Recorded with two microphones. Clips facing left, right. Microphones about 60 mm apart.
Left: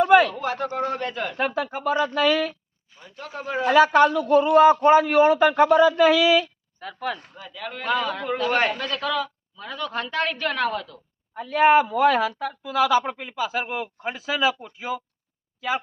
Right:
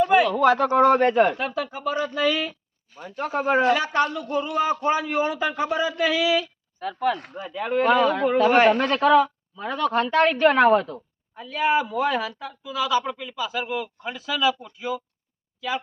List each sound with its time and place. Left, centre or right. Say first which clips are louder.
0.0 s a sound: left 2 dB; left
0.3 s speech: right 9 dB; right
1.4 s speech: left 2 dB; left
3.0 s speech: right 9 dB; right
3.9 s a man's voice: left 6 dB; left
6.7 s speech: right 6 dB; centre
7.3 s speech: right 10 dB; right
8.7 s a woman's voice: right 9 dB; right
10.7 s speech: right 11 dB; right
11.3 s speech: left 5 dB; left
12.0 s a man's voice: left 5 dB; left
13.1 s speech: left 1 dB; left